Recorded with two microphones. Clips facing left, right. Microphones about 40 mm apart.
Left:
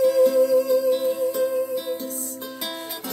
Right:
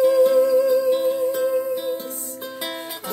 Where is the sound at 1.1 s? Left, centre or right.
Right.